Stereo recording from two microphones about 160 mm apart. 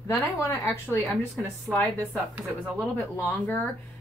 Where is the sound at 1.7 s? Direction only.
10° right (ahead or behind).